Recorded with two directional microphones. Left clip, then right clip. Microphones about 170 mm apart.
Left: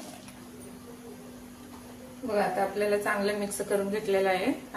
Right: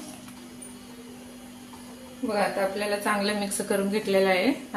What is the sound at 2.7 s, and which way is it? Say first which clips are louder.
A woman's voice: right 1 dB; 50° right (ahead or behind).